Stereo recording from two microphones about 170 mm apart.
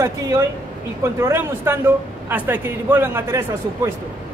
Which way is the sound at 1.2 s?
15° right (ahead or behind).